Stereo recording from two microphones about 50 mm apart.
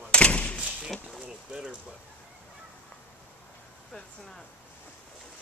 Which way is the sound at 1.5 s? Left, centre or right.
Centre.